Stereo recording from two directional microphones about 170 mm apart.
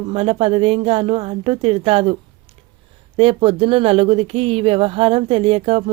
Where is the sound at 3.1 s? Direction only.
30° right (ahead or behind).